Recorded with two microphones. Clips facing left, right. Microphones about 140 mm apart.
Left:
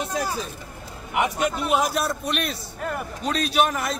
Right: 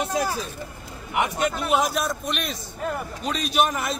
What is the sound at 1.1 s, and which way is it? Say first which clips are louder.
A man's voice: left 1 dB; centre (ahead or behind).